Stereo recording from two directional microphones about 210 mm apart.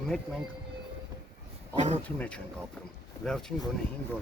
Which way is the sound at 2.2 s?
5° left (ahead or behind).